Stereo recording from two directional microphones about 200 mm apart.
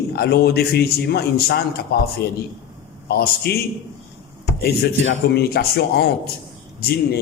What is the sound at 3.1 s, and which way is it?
Speech, 50° left (ahead or behind).